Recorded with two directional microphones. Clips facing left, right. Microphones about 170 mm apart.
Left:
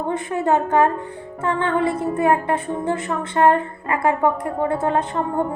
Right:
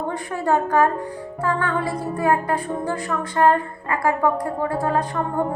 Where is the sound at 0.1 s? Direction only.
20° left (ahead or behind).